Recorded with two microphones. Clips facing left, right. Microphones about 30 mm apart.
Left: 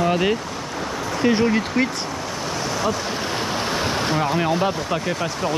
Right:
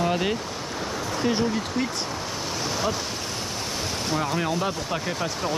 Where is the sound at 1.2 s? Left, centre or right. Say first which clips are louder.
Left 6 dB; left.